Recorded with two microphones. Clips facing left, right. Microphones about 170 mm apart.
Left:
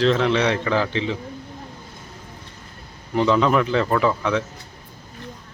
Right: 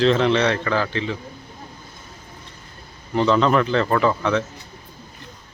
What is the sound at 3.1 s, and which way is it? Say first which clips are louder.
Speech: even; 10° left (ahead or behind).